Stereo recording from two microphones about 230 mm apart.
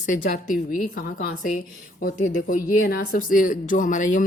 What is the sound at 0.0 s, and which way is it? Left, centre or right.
A woman's voice, left.